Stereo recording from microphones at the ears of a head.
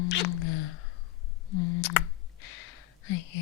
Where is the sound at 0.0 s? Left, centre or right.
Left.